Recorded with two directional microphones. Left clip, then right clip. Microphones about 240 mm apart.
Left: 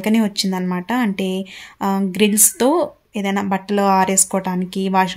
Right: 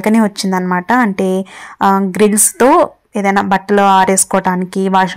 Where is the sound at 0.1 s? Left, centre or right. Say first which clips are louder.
Right 6 dB; centre.